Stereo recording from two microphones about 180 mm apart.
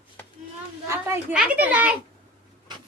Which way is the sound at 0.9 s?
15° right (ahead or behind).